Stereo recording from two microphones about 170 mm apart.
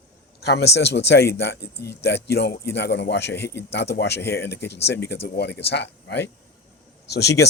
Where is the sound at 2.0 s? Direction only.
80° left.